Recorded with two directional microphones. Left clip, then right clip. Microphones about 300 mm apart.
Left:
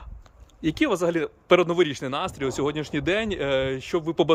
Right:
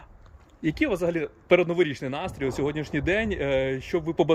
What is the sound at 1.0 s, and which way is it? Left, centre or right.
Speech, centre.